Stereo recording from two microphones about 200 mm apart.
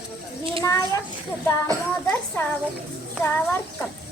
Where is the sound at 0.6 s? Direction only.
15° left (ahead or behind).